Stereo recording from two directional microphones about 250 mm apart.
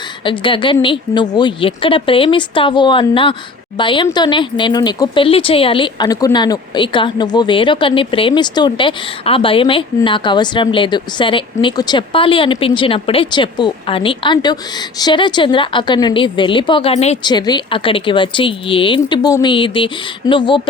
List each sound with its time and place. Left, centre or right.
0.3 s speech: centre